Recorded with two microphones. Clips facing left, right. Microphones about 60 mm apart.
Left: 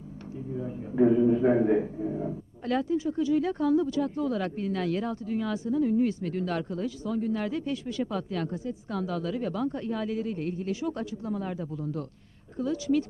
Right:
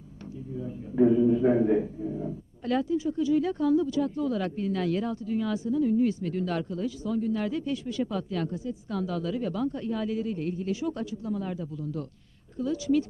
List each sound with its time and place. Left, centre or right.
0.5 s a man's voice: left